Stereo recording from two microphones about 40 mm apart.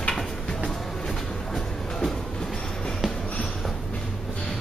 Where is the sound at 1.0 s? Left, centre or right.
Centre.